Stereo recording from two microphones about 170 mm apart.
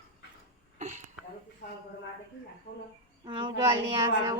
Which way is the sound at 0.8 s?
45° right (ahead or behind).